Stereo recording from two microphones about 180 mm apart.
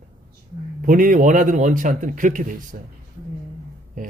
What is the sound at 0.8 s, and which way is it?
Speech, 50° right (ahead or behind).